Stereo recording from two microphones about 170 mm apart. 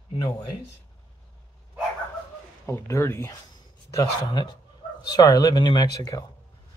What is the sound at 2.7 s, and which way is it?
Speech, 15° left (ahead or behind).